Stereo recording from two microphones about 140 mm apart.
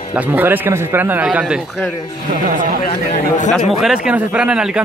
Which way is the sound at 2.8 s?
55° left (ahead or behind).